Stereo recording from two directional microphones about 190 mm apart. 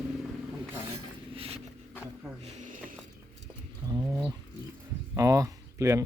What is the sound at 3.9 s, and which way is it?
Bird, 20° right (ahead or behind).